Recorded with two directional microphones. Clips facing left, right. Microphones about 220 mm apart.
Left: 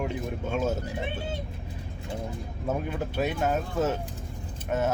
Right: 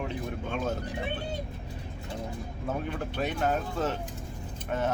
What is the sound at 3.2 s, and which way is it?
Speech, 10° left (ahead or behind).